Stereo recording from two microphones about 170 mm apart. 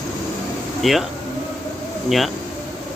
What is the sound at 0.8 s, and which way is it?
Speech, centre (ahead or behind).